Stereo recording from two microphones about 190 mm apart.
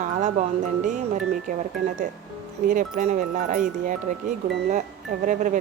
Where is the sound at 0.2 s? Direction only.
40° right (ahead or behind).